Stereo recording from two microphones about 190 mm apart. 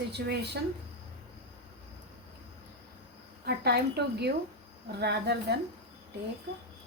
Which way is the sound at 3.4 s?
55° right (ahead or behind).